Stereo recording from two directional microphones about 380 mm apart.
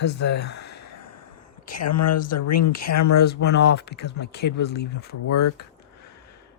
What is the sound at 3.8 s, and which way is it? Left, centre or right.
Speech, left.